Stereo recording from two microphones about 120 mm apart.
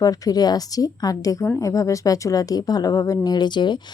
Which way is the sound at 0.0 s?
30° left (ahead or behind).